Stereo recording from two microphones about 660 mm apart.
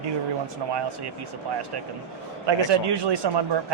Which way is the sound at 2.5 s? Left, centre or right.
Right.